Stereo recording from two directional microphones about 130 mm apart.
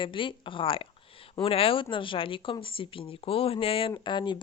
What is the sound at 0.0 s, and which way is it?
Speech, 40° left (ahead or behind).